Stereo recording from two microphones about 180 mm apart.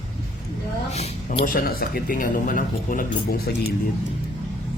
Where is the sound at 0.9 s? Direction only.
40° left (ahead or behind).